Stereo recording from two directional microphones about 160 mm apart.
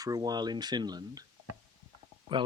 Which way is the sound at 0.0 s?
25° right (ahead or behind).